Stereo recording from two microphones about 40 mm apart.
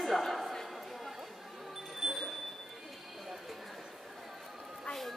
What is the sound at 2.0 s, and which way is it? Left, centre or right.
Bicycle bell, centre.